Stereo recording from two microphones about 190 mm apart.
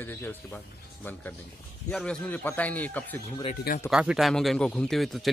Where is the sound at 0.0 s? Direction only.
10° left (ahead or behind).